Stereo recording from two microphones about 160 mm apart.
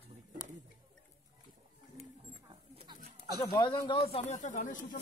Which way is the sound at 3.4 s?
25° left (ahead or behind).